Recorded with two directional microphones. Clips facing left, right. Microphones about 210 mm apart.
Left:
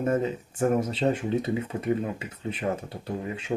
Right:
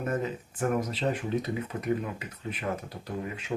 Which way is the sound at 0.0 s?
25° left (ahead or behind).